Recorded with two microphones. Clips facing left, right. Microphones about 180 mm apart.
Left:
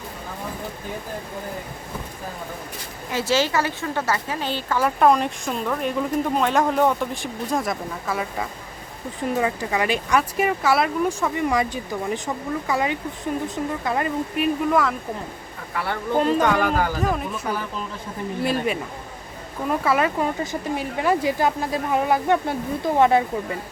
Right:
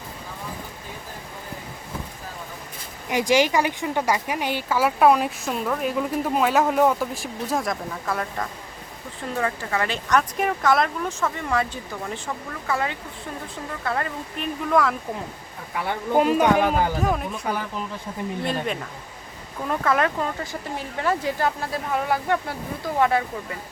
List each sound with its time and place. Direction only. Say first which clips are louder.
3.1 s speech: right 2 dB; 15° right (ahead or behind); by 8.4 s 5° left (ahead or behind)
9.3 s speech: left 2 dB; 15° left (ahead or behind)
15.8 s speech: right 1 dB; 15° right (ahead or behind)
17.0 s speech: even; centre (ahead or behind)
18.4 s speech: left 6 dB; 5° left (ahead or behind); by 23.6 s 25° left (ahead or behind)